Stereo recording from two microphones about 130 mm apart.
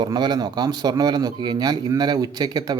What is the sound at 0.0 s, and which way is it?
Speech, 35° right (ahead or behind).